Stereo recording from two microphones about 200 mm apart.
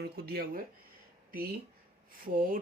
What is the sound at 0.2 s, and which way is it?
Speech, 50° right (ahead or behind).